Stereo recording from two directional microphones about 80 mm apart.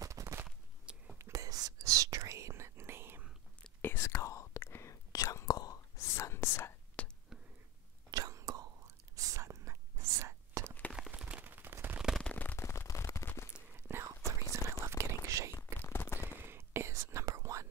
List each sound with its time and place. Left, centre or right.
0.0 s a sound: right
1.1 s whispering: right
3.8 s whispering: left
5.1 s whispering: left
5.9 s whispering: left
7.0 s whispering: centre
8.1 s whispering: right
11.1 s a sound: centre
12.2 s a sound: centre
12.5 s a sound: left
13.7 s whispering: right
15.5 s whispering: left
16.4 s whispering: right